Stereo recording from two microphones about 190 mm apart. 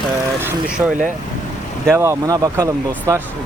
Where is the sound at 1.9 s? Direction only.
15° right (ahead or behind).